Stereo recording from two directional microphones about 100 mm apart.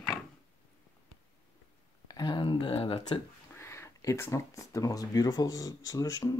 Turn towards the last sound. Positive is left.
turn(degrees=35)  # may be behind; listen again after turning